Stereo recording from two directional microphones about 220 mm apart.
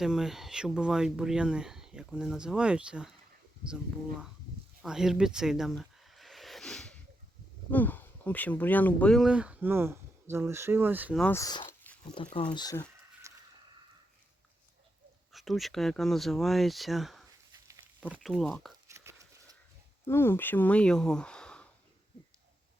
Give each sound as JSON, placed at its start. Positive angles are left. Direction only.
{"t": 0.0, "sound": "speech", "side_deg": 0}
{"t": 4.8, "sound": "a sound", "side_deg": 0}
{"t": 7.7, "sound": "speech", "side_deg": 10}
{"t": 11.2, "sound": "speech", "side_deg": 10}
{"t": 12.1, "sound": "speech", "side_deg": 25}
{"t": 13.2, "sound": "a sound", "side_deg": -15}
{"t": 15.3, "sound": "speech", "side_deg": 0}
{"t": 17.5, "sound": "dog", "side_deg": -15}
{"t": 18.1, "sound": "speech", "side_deg": 0}
{"t": 18.9, "sound": "a sound", "side_deg": -15}
{"t": 20.1, "sound": "speech", "side_deg": 10}